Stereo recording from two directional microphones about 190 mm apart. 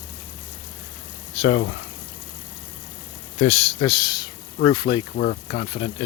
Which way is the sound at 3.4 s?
30° left (ahead or behind).